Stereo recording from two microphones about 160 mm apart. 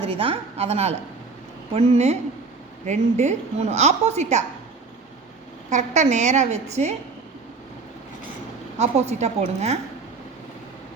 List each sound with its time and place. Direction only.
0.2 s a woman's voice: 40° right (ahead or behind)
5.7 s a woman's voice: 45° right (ahead or behind)
8.8 s a woman's voice: 45° right (ahead or behind)